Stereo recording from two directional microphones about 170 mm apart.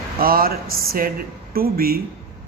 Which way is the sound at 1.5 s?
60° right (ahead or behind).